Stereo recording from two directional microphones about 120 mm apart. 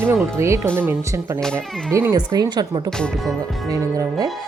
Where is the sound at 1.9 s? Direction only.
20° right (ahead or behind).